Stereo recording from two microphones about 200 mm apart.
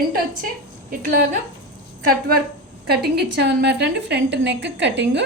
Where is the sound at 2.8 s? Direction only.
55° right (ahead or behind).